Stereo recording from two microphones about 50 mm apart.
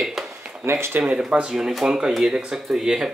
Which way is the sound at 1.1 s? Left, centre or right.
Centre.